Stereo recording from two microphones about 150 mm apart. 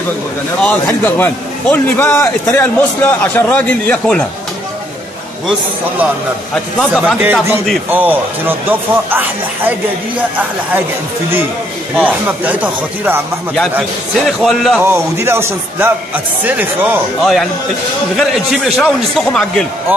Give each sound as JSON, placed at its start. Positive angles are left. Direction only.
{"t": 0.6, "sound": "a man's voice", "side_deg": 10}
{"t": 7.2, "sound": "speech", "side_deg": -10}
{"t": 11.9, "sound": "speech", "side_deg": -10}
{"t": 13.7, "sound": "a man's voice", "side_deg": 0}
{"t": 14.8, "sound": "speech", "side_deg": -15}
{"t": 17.2, "sound": "a man's voice", "side_deg": 0}